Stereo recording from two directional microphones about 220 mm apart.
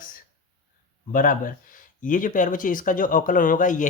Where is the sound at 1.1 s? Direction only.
35° left (ahead or behind).